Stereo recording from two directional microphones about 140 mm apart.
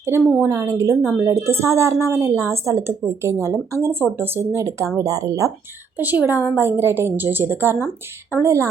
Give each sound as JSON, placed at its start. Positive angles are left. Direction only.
{"t": 0.0, "sound": "speech", "side_deg": -15}
{"t": 6.0, "sound": "a woman's voice", "side_deg": -10}